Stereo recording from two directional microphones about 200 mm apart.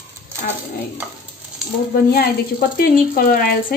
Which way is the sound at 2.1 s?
50° left (ahead or behind).